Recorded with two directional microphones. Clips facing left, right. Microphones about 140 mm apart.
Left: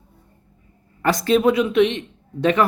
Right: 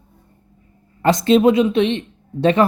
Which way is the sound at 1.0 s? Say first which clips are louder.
Right 4 dB; 25° right (ahead or behind).